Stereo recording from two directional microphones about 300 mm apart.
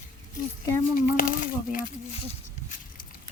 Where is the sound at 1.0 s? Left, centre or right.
Left.